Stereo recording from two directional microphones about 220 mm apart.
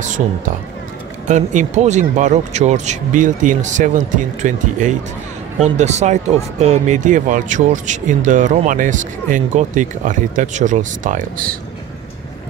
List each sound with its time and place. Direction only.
1.2 s speech: 35° right (ahead or behind)